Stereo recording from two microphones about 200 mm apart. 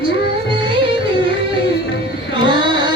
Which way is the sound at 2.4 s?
25° right (ahead or behind).